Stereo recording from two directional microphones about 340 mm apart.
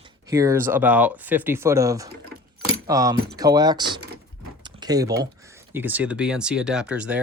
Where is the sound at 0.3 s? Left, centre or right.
Centre.